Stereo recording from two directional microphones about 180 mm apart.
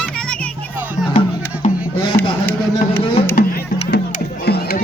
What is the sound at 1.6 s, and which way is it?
Music, 40° left (ahead or behind).